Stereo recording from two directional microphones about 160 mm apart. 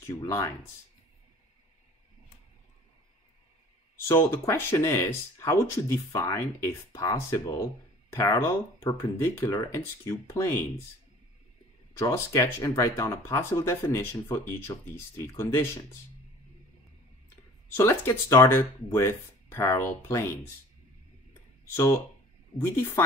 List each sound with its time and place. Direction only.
0.0 s speech: 20° left (ahead or behind)
4.1 s speech: 15° left (ahead or behind)
12.0 s speech: 20° left (ahead or behind)
17.7 s speech: 15° left (ahead or behind)
21.7 s speech: 15° left (ahead or behind)